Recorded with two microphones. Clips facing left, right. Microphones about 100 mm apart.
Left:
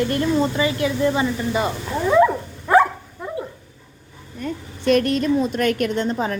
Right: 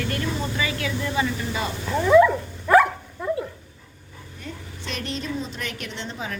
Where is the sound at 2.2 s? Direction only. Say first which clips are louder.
Left 1 dB; 25° left (ahead or behind).